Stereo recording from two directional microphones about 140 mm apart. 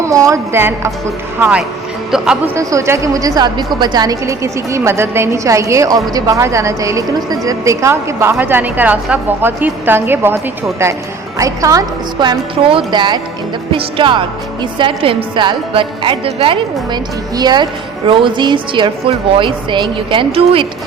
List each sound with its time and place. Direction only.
0.0 s a woman's voice: 25° right (ahead or behind); by 2.4 s 5° right (ahead or behind)
2.6 s a woman's voice: 20° right (ahead or behind)
11.3 s a woman's voice: 25° right (ahead or behind); by 20.7 s 40° right (ahead or behind)